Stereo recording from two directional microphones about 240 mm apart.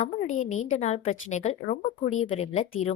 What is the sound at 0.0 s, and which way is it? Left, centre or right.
Speech, left.